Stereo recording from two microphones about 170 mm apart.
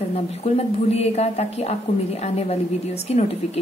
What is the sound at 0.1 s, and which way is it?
A woman's voice, 40° left (ahead or behind).